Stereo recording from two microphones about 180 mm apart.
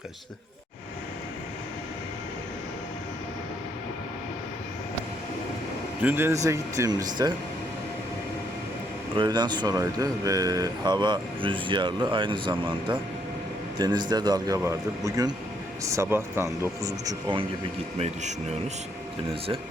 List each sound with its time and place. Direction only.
6.0 s speech: 10° right (ahead or behind)
9.1 s speech: 25° right (ahead or behind)
18.0 s speech: 40° right (ahead or behind)